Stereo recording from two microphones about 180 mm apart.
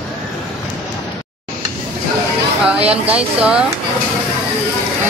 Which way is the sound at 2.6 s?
5° right (ahead or behind).